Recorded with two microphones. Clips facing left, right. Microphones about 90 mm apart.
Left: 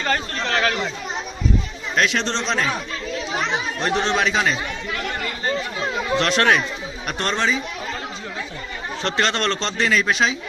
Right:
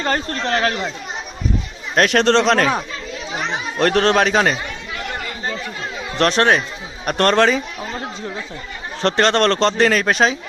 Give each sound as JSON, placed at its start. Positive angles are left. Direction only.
{"t": 0.0, "sound": "speech", "side_deg": -35}
{"t": 2.0, "sound": "speech", "side_deg": -55}
{"t": 3.8, "sound": "speech", "side_deg": -65}
{"t": 6.1, "sound": "speech", "side_deg": -35}
{"t": 7.0, "sound": "speech", "side_deg": -50}
{"t": 9.0, "sound": "speech", "side_deg": -40}